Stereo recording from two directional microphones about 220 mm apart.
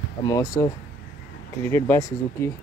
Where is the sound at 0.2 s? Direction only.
15° left (ahead or behind).